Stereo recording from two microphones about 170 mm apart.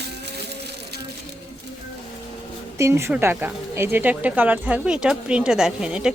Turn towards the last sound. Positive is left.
turn(degrees=-5)  # may be behind; listen again after turning